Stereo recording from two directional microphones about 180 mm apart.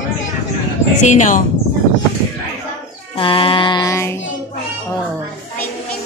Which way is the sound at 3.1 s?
30° left (ahead or behind).